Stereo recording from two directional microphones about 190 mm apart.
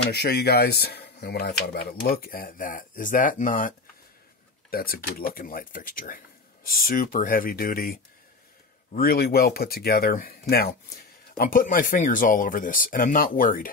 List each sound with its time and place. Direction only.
0.1 s speech: 60° left (ahead or behind)